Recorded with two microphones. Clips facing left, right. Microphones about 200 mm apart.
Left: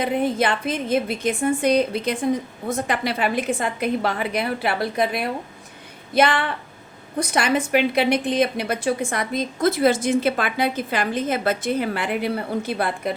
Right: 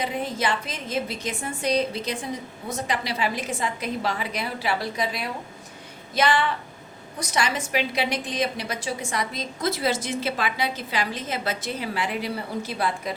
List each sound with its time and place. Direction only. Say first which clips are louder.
0.0 s a woman's voice: left 6 dB; 60° left (ahead or behind)